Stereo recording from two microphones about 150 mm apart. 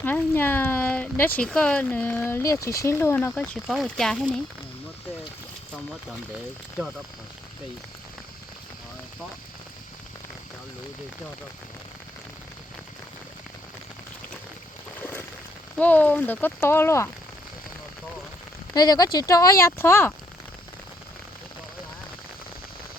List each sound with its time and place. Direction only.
0.0 s speech: 15° left (ahead or behind)
3.3 s speech: 5° left (ahead or behind)
15.8 s speech: 10° left (ahead or behind)
18.7 s speech: 25° left (ahead or behind)